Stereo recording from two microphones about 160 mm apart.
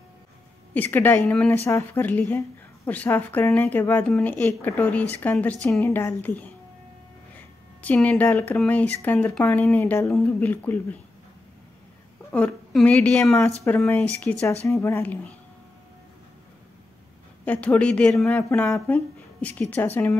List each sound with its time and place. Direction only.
0.7 s a woman's voice: 10° left (ahead or behind)
7.8 s a woman's voice: 10° left (ahead or behind)
12.3 s a woman's voice: 10° left (ahead or behind)
17.5 s a woman's voice: 10° left (ahead or behind)